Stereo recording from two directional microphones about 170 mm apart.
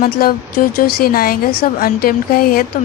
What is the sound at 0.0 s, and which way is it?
A woman's voice, 60° left (ahead or behind).